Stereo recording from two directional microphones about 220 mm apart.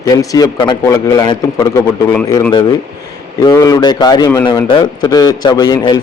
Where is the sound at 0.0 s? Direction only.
15° left (ahead or behind).